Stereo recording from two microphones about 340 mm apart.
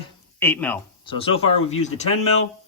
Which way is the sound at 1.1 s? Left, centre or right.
Centre.